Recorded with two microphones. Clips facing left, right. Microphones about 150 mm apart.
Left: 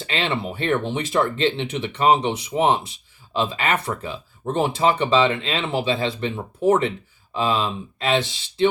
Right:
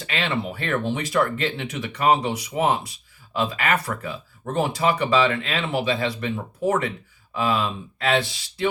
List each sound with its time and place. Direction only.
0.0 s speech: 25° left (ahead or behind)